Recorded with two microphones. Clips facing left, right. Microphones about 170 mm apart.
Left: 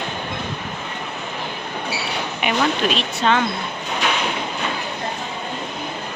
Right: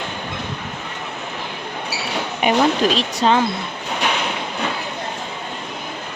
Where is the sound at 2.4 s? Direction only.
35° right (ahead or behind).